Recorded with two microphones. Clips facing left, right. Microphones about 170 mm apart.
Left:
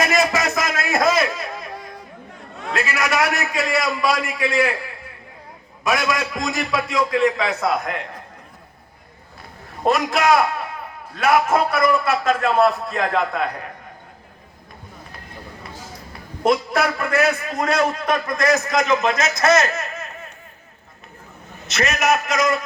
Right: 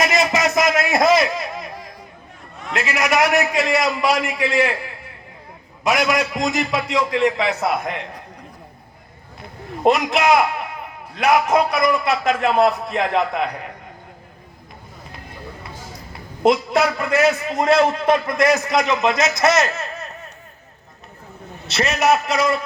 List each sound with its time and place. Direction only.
0.0 s a sound: 20° right (ahead or behind)
2.7 s a man's voice: 20° right (ahead or behind)
5.8 s a man's voice: 20° right (ahead or behind)
9.8 s a man's voice: 20° right (ahead or behind)
16.4 s a man's voice: 20° right (ahead or behind)
21.7 s a man's voice: 30° right (ahead or behind)